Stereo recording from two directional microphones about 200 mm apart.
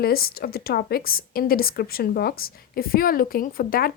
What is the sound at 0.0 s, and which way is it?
Speech, 50° left (ahead or behind).